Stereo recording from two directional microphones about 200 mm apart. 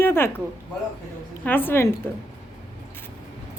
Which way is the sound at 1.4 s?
10° left (ahead or behind).